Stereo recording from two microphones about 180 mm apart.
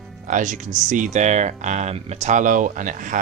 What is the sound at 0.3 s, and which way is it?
Speech, 45° right (ahead or behind).